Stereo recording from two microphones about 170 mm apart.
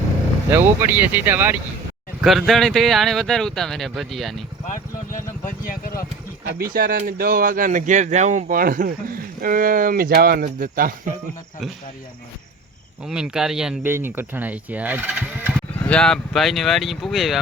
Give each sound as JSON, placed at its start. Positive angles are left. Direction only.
{"t": 0.5, "sound": "speech", "side_deg": -15}
{"t": 2.2, "sound": "speech", "side_deg": 0}
{"t": 4.7, "sound": "speech", "side_deg": 50}
{"t": 6.6, "sound": "speech", "side_deg": -60}
{"t": 13.1, "sound": "speech", "side_deg": -5}
{"t": 15.5, "sound": "speech", "side_deg": 5}